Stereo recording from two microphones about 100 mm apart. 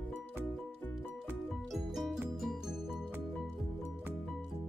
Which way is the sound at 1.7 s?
Centre (ahead or behind).